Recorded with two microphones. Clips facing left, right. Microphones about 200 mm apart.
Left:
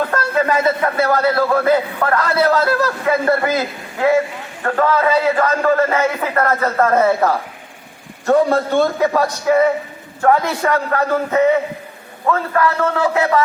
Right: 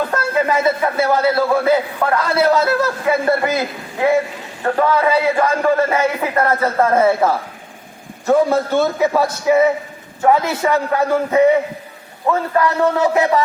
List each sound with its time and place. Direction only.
0.2 s a man's voice: 10° right (ahead or behind)
4.6 s a man's voice: 15° right (ahead or behind)